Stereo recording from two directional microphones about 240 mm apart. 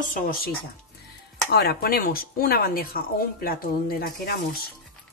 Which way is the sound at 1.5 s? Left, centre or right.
Left.